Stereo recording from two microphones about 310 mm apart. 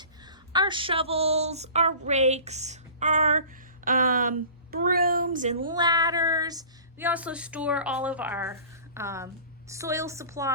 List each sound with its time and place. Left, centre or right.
0.3 s a woman's voice: centre